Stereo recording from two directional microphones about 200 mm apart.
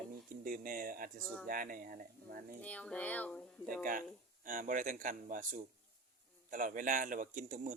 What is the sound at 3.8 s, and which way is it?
Speech, 45° right (ahead or behind).